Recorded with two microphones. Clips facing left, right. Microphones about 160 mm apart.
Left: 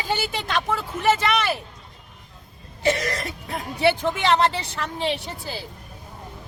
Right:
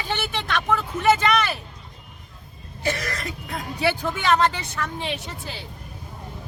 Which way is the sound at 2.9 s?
25° left (ahead or behind).